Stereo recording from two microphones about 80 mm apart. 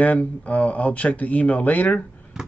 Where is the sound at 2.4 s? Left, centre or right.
Centre.